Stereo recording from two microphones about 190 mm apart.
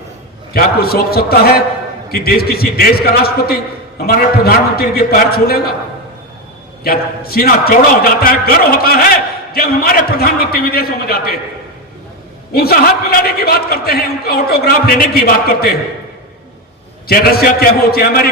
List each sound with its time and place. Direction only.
0.5 s a man's voice: 55° left (ahead or behind)
6.8 s a man's voice: 55° left (ahead or behind)
12.5 s a man's voice: 55° left (ahead or behind)
17.1 s a man's voice: 50° left (ahead or behind)